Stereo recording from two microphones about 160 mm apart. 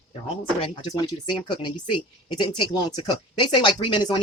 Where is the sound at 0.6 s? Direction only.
30° left (ahead or behind).